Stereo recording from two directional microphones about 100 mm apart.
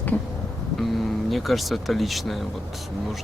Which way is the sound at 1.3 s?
Centre (ahead or behind).